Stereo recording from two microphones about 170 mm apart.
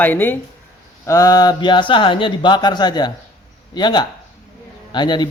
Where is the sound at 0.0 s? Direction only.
10° left (ahead or behind).